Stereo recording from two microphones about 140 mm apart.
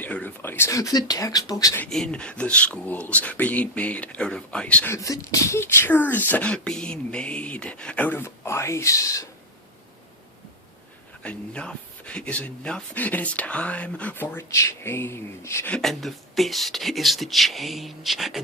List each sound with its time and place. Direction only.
0.0 s speech: 10° left (ahead or behind)
1.9 s speech: 5° left (ahead or behind)
4.9 s speech: 25° left (ahead or behind)
11.2 s speech: 10° left (ahead or behind)
15.7 s speech: centre (ahead or behind)